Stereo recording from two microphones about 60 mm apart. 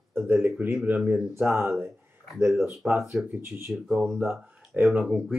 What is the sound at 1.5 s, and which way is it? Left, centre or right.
Speech, right.